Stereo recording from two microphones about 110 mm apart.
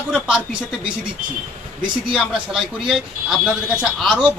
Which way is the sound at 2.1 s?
5° right (ahead or behind).